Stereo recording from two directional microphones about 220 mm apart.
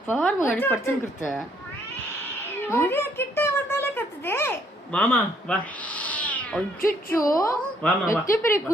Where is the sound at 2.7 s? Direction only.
10° left (ahead or behind).